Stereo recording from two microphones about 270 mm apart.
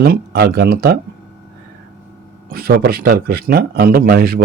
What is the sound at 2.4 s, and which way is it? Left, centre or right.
A man's voice, right.